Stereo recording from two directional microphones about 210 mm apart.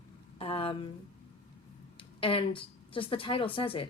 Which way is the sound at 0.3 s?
25° left (ahead or behind).